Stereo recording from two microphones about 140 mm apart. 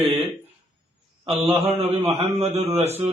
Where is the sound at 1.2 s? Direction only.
45° right (ahead or behind).